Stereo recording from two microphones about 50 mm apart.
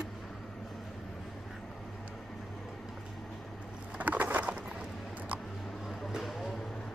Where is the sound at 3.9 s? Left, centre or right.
Right.